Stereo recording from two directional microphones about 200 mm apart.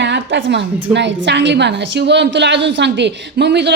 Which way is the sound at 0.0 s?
65° right (ahead or behind).